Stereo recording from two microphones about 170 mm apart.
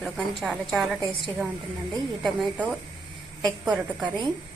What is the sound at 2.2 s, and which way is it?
A woman's voice, centre (ahead or behind).